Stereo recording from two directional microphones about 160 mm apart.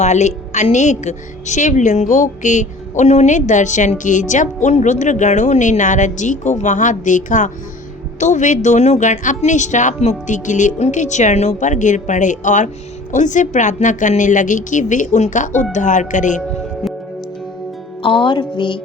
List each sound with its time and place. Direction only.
0.0 s a woman's voice: 45° left (ahead or behind)
18.0 s music: 30° left (ahead or behind)